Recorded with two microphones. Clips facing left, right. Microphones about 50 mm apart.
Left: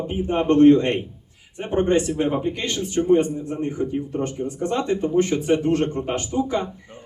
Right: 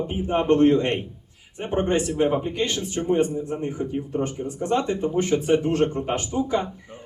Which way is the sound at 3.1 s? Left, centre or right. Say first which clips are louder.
Left 2 dB; centre.